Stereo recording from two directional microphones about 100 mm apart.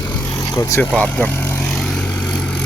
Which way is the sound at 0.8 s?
15° left (ahead or behind).